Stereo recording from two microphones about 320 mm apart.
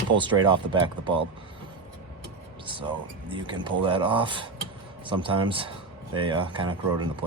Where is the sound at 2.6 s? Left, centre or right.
Centre.